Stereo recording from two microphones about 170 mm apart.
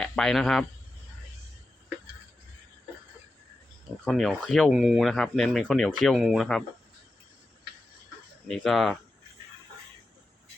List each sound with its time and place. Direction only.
0.0 s a man's voice: 5° left (ahead or behind)
4.0 s speech: centre (ahead or behind)
8.4 s speech: centre (ahead or behind)